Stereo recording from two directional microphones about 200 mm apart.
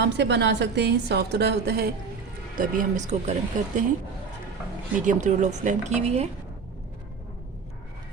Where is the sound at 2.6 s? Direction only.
40° right (ahead or behind).